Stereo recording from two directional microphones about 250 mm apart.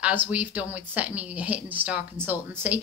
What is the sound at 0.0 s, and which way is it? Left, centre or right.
A woman's voice, centre.